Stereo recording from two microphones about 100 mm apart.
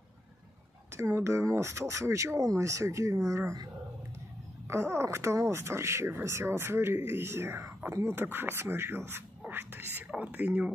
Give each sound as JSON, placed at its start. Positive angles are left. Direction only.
{"t": 1.1, "sound": "speech", "side_deg": -30}
{"t": 4.6, "sound": "speech", "side_deg": -25}